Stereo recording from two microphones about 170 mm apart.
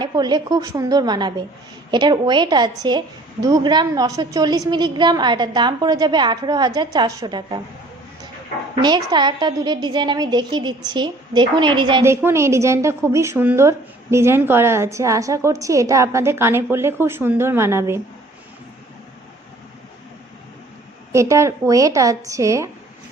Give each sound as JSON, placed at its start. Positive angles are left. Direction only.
{"t": 0.0, "sound": "a woman's voice", "side_deg": -25}
{"t": 8.7, "sound": "a woman's voice", "side_deg": -25}
{"t": 12.0, "sound": "a woman's voice", "side_deg": -15}
{"t": 21.1, "sound": "a woman's voice", "side_deg": -15}